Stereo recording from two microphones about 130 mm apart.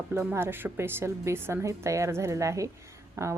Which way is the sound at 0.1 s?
15° right (ahead or behind).